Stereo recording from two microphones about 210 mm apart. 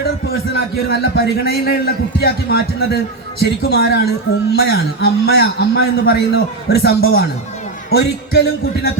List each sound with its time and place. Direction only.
0.9 s a man's voice: 50° left (ahead or behind)